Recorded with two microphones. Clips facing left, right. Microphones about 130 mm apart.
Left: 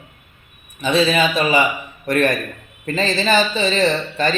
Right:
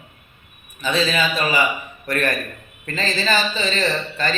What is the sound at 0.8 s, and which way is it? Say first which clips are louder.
A man's voice: left 4 dB; 20° left (ahead or behind).